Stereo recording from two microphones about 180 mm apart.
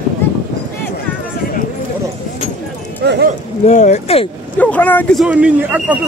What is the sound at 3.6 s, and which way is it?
Speech, 40° left (ahead or behind).